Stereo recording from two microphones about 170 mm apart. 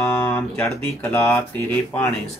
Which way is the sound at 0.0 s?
15° left (ahead or behind).